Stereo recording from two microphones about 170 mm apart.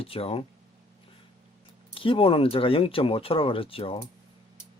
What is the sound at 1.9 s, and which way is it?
Speech, 30° left (ahead or behind).